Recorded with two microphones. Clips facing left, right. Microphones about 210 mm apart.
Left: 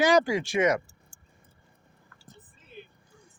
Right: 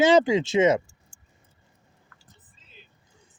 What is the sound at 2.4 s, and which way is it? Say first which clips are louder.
Whispering: left 13 dB; 55° left (ahead or behind).